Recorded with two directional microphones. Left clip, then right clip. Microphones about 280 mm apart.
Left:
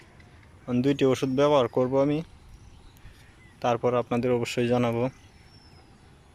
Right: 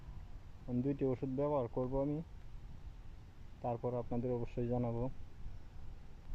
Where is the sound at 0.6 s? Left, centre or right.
Left.